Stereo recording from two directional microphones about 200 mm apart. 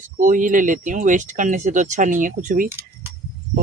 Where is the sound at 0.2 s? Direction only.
40° right (ahead or behind).